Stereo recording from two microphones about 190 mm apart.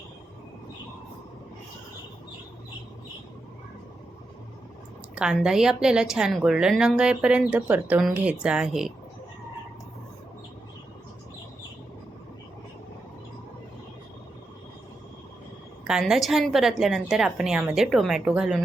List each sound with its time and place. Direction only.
5.1 s a woman's voice: 5° right (ahead or behind)
15.9 s a woman's voice: centre (ahead or behind)